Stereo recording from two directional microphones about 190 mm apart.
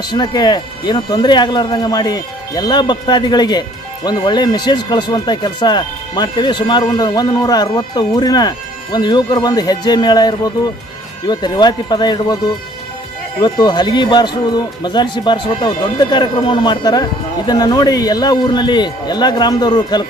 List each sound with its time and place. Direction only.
0.1 s speech: 20° left (ahead or behind)
13.4 s speech: 25° left (ahead or behind)